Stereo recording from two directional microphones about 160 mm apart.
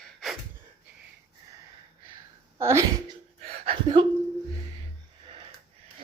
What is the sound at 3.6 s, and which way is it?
Speech, 30° right (ahead or behind).